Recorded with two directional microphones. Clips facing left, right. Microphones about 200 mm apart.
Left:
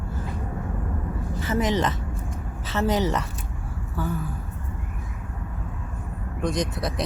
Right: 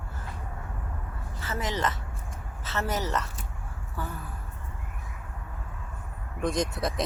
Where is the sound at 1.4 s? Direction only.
15° left (ahead or behind).